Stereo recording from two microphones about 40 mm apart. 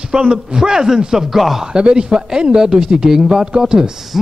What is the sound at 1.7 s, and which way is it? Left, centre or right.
A man's voice, right.